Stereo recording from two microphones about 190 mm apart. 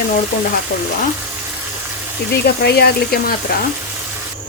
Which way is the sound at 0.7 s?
45° left (ahead or behind).